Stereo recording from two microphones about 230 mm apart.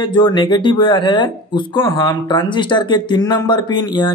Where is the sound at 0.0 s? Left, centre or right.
Centre.